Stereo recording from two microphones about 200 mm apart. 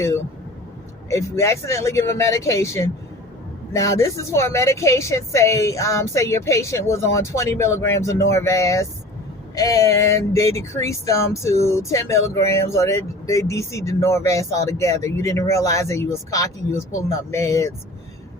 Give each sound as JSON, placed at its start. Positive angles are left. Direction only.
{"t": 1.1, "sound": "a woman's voice", "side_deg": 15}